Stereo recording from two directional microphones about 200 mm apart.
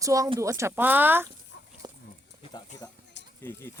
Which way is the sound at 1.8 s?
20° right (ahead or behind).